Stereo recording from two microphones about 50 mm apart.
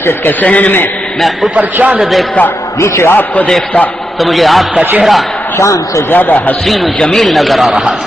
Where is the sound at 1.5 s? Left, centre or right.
Right.